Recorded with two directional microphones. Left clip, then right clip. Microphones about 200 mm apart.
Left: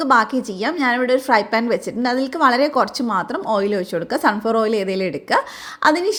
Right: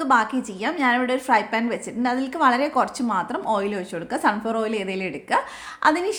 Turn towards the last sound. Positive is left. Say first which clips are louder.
# left 4 dB
turn(degrees=20)  # may be behind; listen again after turning